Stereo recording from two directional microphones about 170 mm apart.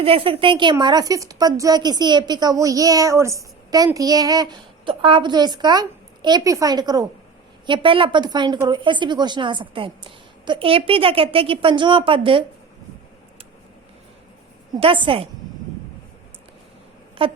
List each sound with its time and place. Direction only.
0.0 s a woman's voice: 35° right (ahead or behind)
14.8 s a woman's voice: 30° right (ahead or behind)
17.2 s a sound: 35° right (ahead or behind)